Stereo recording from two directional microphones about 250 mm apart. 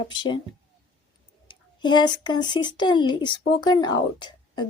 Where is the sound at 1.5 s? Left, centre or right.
Centre.